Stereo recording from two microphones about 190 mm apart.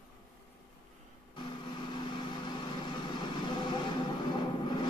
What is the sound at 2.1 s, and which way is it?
Vehicle, 25° left (ahead or behind).